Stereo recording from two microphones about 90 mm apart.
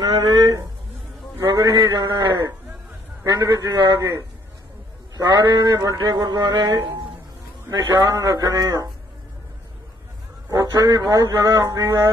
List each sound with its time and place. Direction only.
0.3 s a sound: 50° right (ahead or behind)
1.5 s mantra: 40° right (ahead or behind)
1.8 s speech: 55° right (ahead or behind)
5.1 s speech: 50° right (ahead or behind)
7.7 s speech: 40° right (ahead or behind)
10.5 s speech: 45° right (ahead or behind)